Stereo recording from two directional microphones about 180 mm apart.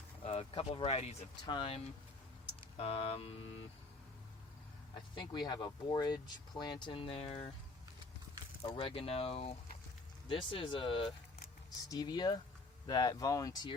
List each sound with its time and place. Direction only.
0.3 s speech: 30° left (ahead or behind)
4.9 s speech: 25° left (ahead or behind)
8.7 s speech: 30° left (ahead or behind)